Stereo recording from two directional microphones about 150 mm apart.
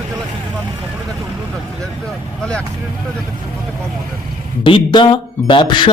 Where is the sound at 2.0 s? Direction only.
5° left (ahead or behind).